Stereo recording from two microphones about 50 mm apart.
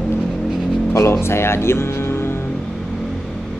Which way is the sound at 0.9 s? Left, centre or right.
Left.